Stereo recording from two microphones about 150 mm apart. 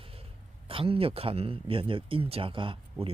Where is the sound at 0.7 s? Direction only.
40° right (ahead or behind).